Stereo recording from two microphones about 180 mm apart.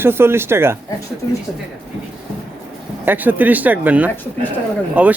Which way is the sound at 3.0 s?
10° right (ahead or behind).